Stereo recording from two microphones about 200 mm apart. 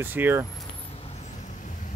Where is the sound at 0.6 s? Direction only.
30° left (ahead or behind).